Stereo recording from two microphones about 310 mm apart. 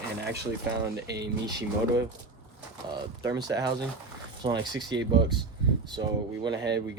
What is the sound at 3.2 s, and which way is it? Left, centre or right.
Speech, centre.